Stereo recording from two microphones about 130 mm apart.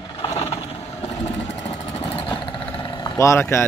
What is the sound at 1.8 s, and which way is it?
Vehicle, 35° left (ahead or behind).